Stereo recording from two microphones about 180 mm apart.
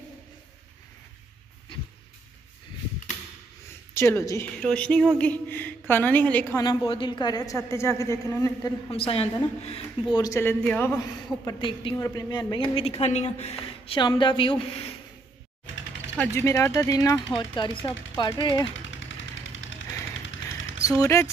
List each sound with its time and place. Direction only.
3.9 s a woman's voice: 15° left (ahead or behind)
6.6 s a woman's voice: 25° left (ahead or behind)
8.9 s a woman's voice: 30° left (ahead or behind)
10.1 s a woman's voice: 20° left (ahead or behind)
11.4 s a woman's voice: 25° left (ahead or behind)
16.2 s a woman's voice: 15° left (ahead or behind)
18.7 s a sound: 90° left
20.8 s speech: 15° left (ahead or behind)